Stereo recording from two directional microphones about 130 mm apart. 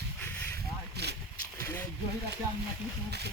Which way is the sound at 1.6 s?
20° left (ahead or behind).